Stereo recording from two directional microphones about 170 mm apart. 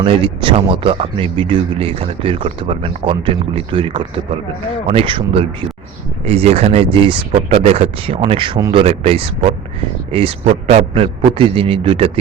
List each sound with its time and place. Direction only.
0.0 s speech: 30° right (ahead or behind)
6.2 s speech: 35° right (ahead or behind)
8.8 s speech: 35° right (ahead or behind)